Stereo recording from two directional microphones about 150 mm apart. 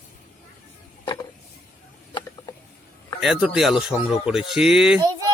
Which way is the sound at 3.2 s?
5° right (ahead or behind).